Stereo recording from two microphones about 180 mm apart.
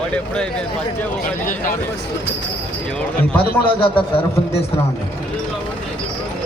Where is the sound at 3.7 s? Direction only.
30° left (ahead or behind).